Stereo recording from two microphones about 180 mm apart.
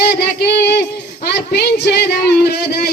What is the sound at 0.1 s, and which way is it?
Music, 65° left (ahead or behind).